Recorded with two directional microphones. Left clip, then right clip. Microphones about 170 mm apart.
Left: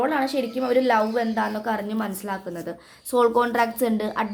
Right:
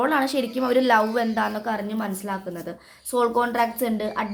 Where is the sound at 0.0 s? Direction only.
10° right (ahead or behind).